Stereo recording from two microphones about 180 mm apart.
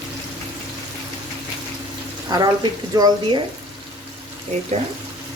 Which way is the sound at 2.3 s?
25° right (ahead or behind).